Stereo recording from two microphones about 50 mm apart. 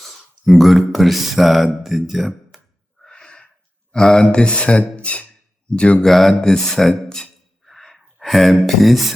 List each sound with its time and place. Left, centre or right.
0.0 s speech: centre
3.1 s a sound: centre
3.9 s speech: centre
6.1 s speech: centre